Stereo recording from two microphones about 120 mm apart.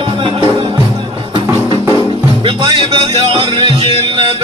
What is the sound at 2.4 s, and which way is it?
Music, 40° right (ahead or behind).